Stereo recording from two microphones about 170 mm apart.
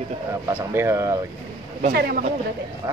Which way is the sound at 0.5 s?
15° right (ahead or behind).